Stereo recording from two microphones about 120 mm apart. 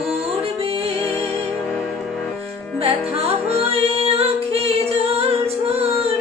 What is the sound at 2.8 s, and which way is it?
Music, 55° right (ahead or behind).